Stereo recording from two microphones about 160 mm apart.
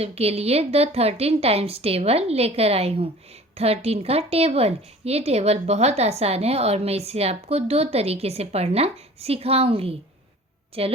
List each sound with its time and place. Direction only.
0.0 s a woman's voice: 40° right (ahead or behind)